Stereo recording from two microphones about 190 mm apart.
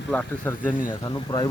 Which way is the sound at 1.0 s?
20° left (ahead or behind).